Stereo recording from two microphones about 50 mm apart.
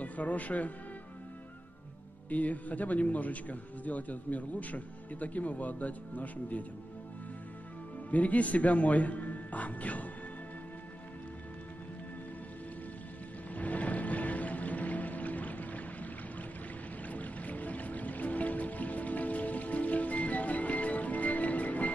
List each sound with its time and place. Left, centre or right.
0.0 s speech: left
2.2 s a man's voice: left
8.1 s a man's voice: left
13.6 s music: left